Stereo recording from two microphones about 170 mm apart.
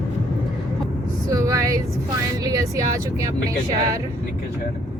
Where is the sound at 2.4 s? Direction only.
20° right (ahead or behind).